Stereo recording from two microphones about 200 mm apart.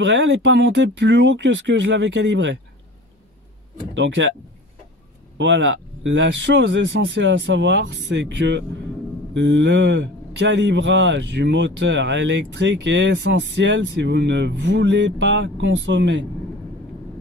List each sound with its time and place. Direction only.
0.0 s a man's voice: 60° right (ahead or behind)
3.9 s a man's voice: 65° right (ahead or behind)
5.4 s a man's voice: 65° right (ahead or behind)